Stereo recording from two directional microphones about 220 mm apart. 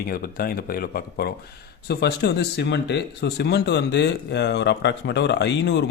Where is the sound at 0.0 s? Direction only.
45° left (ahead or behind).